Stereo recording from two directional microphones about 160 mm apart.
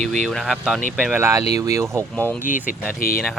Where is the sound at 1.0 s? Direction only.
10° right (ahead or behind).